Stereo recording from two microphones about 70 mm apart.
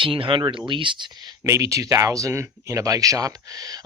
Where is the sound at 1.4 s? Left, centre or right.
Right.